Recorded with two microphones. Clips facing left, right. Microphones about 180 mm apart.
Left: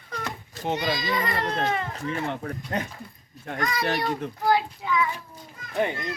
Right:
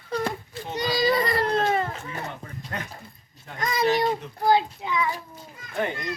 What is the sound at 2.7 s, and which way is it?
Speech, 25° left (ahead or behind).